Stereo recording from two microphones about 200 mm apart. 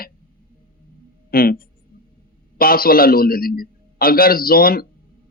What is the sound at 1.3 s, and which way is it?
A man's voice, 45° left (ahead or behind).